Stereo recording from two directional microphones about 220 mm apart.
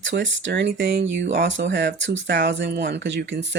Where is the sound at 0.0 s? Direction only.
55° right (ahead or behind).